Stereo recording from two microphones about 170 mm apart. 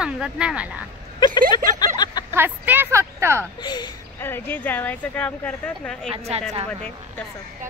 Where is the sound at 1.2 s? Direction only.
25° left (ahead or behind).